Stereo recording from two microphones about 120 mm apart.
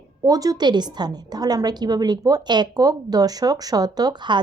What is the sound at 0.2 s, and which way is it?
A woman's voice, 30° right (ahead or behind).